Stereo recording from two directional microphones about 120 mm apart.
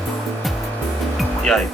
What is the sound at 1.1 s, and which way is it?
Music, 5° left (ahead or behind).